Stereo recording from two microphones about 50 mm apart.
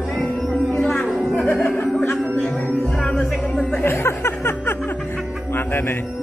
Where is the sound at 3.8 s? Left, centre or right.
Left.